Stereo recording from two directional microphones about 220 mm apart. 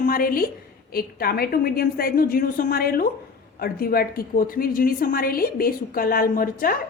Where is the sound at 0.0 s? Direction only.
40° left (ahead or behind).